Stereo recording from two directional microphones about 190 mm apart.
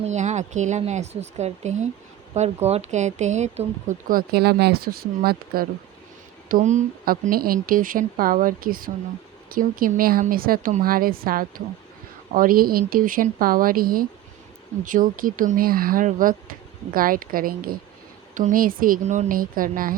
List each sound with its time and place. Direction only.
0.0 s speech: 40° right (ahead or behind)
4.1 s speech: 50° right (ahead or behind)
6.5 s speech: 40° right (ahead or behind)